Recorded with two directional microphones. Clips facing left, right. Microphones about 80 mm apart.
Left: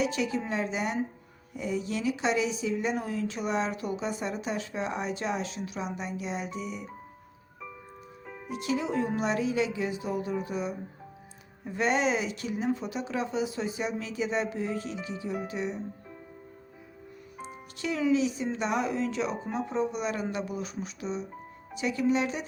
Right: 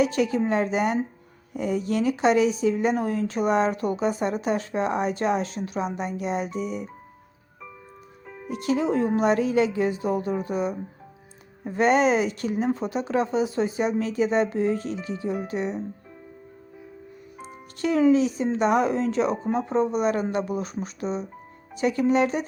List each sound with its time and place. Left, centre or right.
0.0 s speech: right
8.4 s speech: right
17.3 s music: centre
17.7 s speech: right